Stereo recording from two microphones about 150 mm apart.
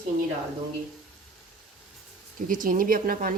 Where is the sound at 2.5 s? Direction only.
65° right (ahead or behind).